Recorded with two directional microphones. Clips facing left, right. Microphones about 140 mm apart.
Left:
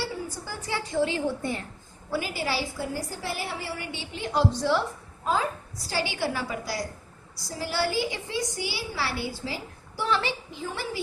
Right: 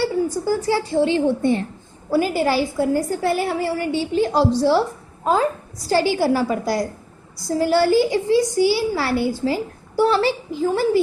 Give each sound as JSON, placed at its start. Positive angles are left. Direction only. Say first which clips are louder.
{"t": 0.4, "sound": "a woman's voice", "louder": "right 13 dB", "side_deg": -40}
{"t": 2.0, "sound": "a woman's voice", "louder": "right 11 dB", "side_deg": -45}
{"t": 5.2, "sound": "a woman's voice", "louder": "right 8 dB", "side_deg": -50}